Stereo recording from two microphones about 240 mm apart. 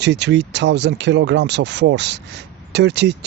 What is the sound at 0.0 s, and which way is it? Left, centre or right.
Speech, right.